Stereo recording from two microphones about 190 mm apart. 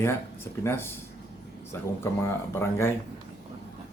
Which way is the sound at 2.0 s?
15° left (ahead or behind).